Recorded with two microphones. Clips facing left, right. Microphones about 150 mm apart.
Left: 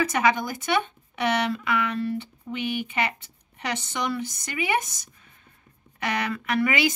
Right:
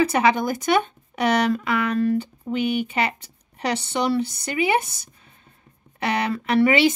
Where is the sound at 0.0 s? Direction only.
30° right (ahead or behind).